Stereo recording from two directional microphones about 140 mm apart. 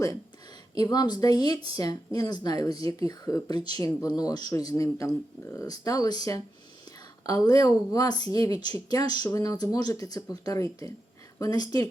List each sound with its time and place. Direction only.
0.8 s speech: 30° left (ahead or behind)